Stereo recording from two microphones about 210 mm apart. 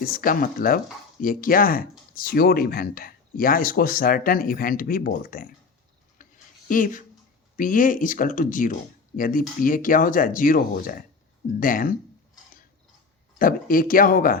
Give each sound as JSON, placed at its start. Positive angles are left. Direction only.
{"t": 0.0, "sound": "speech", "side_deg": 40}
{"t": 6.1, "sound": "a sound", "side_deg": 40}
{"t": 7.5, "sound": "speech", "side_deg": 40}
{"t": 13.4, "sound": "speech", "side_deg": 40}